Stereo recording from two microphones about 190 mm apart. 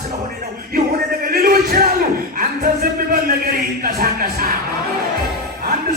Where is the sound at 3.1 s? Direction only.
50° right (ahead or behind).